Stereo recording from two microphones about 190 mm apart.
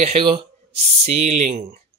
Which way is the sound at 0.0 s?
30° right (ahead or behind).